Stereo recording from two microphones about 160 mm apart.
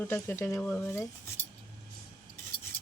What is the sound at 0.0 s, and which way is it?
Speech, 15° left (ahead or behind).